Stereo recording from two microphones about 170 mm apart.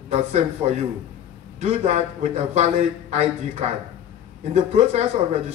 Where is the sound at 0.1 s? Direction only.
40° right (ahead or behind).